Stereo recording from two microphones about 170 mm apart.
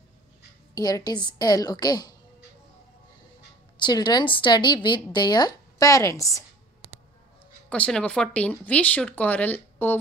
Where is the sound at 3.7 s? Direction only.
25° left (ahead or behind).